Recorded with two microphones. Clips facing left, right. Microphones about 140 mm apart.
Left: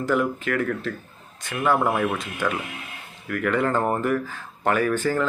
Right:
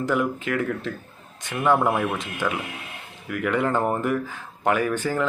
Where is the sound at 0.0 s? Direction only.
15° right (ahead or behind).